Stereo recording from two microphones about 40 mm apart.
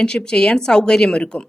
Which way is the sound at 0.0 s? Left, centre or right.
Left.